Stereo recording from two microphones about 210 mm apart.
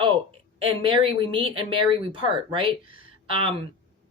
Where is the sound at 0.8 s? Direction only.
25° right (ahead or behind).